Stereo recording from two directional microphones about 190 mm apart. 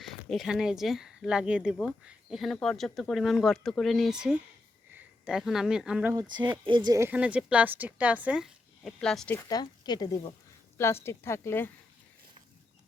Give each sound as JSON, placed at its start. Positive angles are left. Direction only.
{"t": 0.0, "sound": "speech", "side_deg": 0}
{"t": 6.7, "sound": "a woman's voice", "side_deg": -25}
{"t": 9.4, "sound": "a woman's voice", "side_deg": 20}